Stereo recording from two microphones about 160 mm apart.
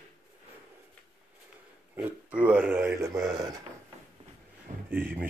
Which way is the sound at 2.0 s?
10° right (ahead or behind).